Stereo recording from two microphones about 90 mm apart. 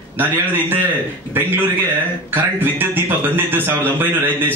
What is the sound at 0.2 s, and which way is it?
A man's voice, 20° right (ahead or behind).